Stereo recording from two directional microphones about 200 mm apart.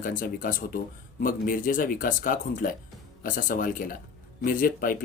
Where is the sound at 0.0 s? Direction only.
40° left (ahead or behind).